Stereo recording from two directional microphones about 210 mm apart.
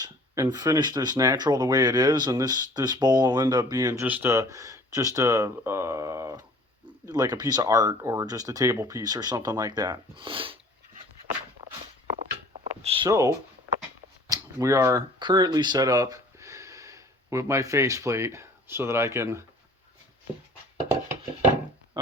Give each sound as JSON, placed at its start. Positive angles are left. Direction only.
{"t": 0.0, "sound": "speech", "side_deg": -20}
{"t": 12.8, "sound": "speech", "side_deg": -25}
{"t": 13.1, "sound": "speech", "side_deg": -15}